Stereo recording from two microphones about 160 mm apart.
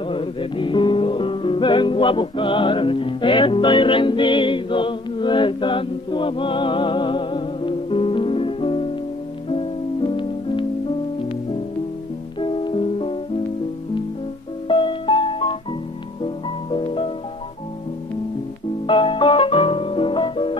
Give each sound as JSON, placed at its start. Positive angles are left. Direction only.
{"t": 0.1, "sound": "music", "side_deg": 35}
{"t": 12.4, "sound": "music", "side_deg": 30}
{"t": 14.7, "sound": "music", "side_deg": 30}
{"t": 18.9, "sound": "music", "side_deg": 30}